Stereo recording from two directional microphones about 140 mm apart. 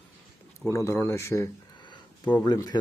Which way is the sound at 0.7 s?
20° left (ahead or behind).